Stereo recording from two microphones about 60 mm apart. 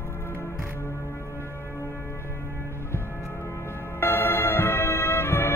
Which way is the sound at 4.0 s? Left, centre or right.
Left.